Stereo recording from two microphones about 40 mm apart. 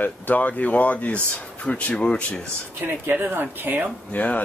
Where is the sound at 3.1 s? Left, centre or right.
Right.